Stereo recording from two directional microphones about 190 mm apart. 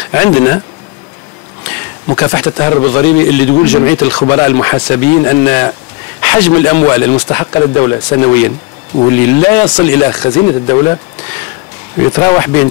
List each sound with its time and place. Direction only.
0.1 s speech: 15° left (ahead or behind)
1.6 s a sound: 10° left (ahead or behind)
2.0 s a man's voice: 20° left (ahead or behind)